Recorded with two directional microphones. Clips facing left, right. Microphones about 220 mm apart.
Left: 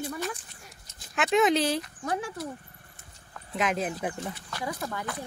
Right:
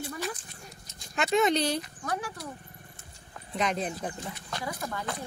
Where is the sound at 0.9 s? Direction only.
5° left (ahead or behind).